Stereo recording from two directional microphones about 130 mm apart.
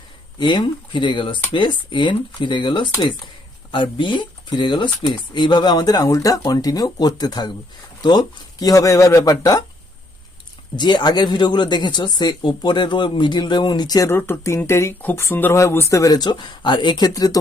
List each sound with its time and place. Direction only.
0.3 s speech: 35° left (ahead or behind)
10.8 s speech: 35° left (ahead or behind)
14.1 s speech: 20° left (ahead or behind)